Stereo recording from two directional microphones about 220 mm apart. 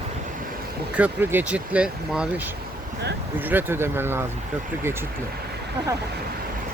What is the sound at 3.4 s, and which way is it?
Speech, 10° right (ahead or behind).